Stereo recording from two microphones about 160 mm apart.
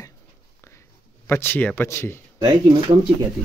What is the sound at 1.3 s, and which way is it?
Speech, 15° left (ahead or behind).